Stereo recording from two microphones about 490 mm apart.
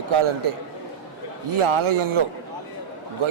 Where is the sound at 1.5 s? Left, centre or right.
Right.